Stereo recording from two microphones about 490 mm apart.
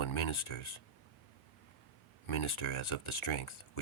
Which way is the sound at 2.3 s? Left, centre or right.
Left.